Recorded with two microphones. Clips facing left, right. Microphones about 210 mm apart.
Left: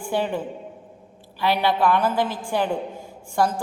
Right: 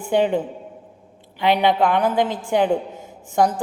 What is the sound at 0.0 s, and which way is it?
A man's voice, 20° right (ahead or behind).